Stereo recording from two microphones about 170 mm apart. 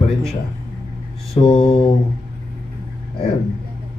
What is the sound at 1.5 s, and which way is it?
Mantra, 35° left (ahead or behind).